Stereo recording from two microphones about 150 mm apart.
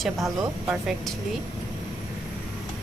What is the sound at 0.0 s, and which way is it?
Speech, centre (ahead or behind).